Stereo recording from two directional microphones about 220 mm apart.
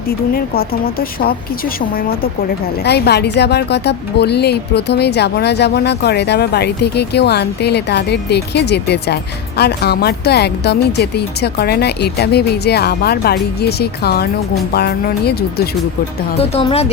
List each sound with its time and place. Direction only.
0.1 s a woman's voice: 45° left (ahead or behind)
16.4 s speech: 25° left (ahead or behind)